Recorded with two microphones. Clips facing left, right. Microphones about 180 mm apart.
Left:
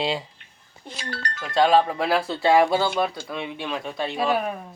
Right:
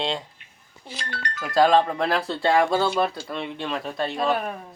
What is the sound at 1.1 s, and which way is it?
Music, 30° left (ahead or behind).